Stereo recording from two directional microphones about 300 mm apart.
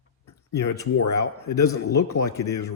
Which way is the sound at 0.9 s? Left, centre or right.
Left.